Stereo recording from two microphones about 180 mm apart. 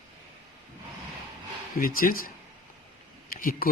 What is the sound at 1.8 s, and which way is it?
Speech, 50° left (ahead or behind).